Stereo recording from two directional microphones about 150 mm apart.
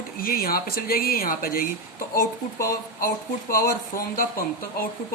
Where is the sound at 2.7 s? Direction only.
75° left (ahead or behind).